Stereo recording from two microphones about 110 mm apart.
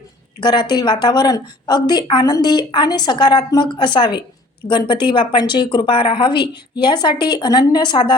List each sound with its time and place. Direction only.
0.3 s a woman's voice: 45° left (ahead or behind)